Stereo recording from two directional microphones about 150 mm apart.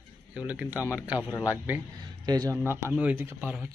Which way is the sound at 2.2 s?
25° right (ahead or behind).